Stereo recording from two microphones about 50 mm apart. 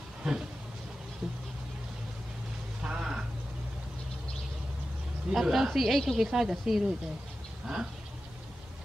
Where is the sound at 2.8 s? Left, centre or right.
Centre.